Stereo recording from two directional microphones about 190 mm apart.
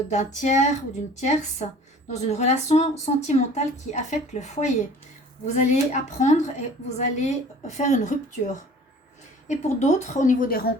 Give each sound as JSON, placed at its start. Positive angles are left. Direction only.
{"t": 0.1, "sound": "a woman's voice", "side_deg": 40}
{"t": 9.5, "sound": "a woman's voice", "side_deg": 35}